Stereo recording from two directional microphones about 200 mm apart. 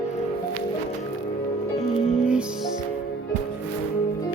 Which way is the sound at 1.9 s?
30° left (ahead or behind).